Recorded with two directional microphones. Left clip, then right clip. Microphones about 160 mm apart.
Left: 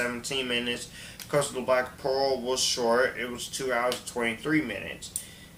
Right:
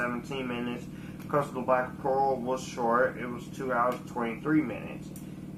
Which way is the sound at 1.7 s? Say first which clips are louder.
Even; 40° left (ahead or behind).